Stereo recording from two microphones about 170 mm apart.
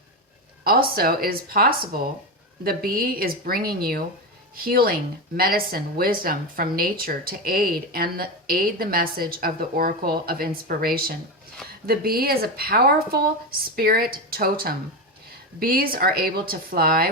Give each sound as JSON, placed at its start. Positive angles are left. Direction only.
{"t": 0.6, "sound": "speech", "side_deg": -60}